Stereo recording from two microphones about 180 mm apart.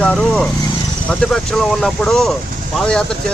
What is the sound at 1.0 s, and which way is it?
Speech, 5° left (ahead or behind).